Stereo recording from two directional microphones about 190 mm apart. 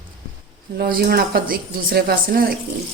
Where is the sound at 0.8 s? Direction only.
50° right (ahead or behind).